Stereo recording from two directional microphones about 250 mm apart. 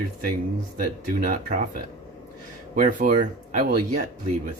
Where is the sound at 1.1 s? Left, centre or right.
Right.